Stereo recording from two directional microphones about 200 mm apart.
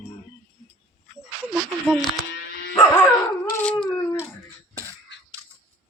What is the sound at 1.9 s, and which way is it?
Music, centre (ahead or behind).